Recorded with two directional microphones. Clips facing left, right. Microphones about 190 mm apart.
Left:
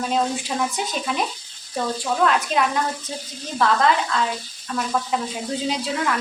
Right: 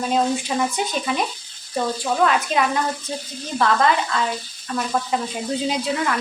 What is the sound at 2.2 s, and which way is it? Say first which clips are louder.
A woman's voice: even; 5° right (ahead or behind).